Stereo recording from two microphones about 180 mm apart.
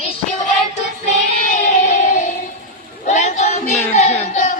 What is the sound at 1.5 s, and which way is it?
Music, 45° left (ahead or behind).